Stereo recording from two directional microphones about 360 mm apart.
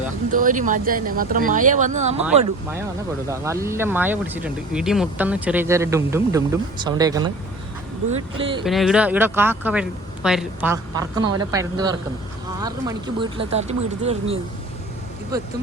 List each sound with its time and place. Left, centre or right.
0.3 s a woman's voice: right
3.2 s speech: centre
8.4 s speech: centre
8.6 s speech: centre